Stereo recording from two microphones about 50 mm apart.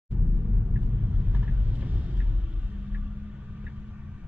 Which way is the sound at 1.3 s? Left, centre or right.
Right.